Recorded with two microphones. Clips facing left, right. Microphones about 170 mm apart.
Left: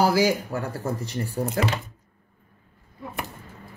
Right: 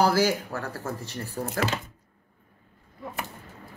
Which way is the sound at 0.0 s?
15° left (ahead or behind).